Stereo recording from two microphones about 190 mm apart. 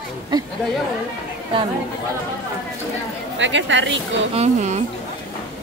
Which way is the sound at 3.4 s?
75° right (ahead or behind).